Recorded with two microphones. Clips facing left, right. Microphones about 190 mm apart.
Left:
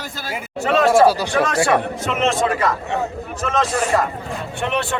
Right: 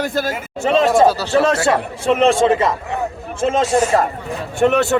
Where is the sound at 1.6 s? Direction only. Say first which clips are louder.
Right 2 dB; 30° right (ahead or behind).